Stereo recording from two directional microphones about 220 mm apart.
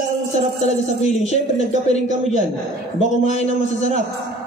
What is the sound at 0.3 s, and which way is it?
A man's voice, 30° left (ahead or behind).